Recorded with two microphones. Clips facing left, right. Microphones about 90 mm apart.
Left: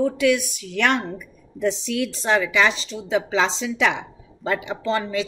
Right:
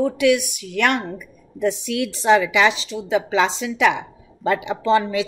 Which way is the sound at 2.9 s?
60° right (ahead or behind).